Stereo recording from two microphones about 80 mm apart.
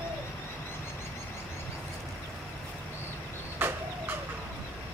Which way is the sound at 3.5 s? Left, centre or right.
Right.